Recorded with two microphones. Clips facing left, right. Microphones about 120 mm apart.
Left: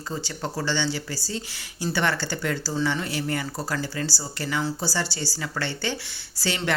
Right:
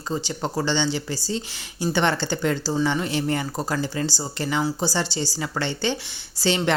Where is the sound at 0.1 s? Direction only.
20° right (ahead or behind).